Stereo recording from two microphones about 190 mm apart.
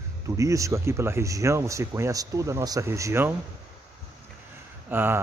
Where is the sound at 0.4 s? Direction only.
15° right (ahead or behind).